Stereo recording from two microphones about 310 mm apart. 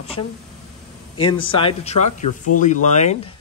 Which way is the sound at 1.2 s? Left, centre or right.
Centre.